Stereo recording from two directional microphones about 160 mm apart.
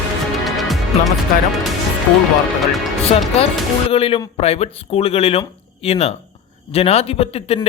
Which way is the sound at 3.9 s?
35° left (ahead or behind).